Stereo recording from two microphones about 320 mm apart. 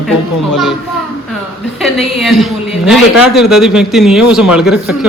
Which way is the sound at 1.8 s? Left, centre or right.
Centre.